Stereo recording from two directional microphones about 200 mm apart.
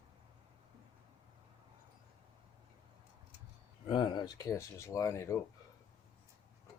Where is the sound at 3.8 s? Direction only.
25° left (ahead or behind).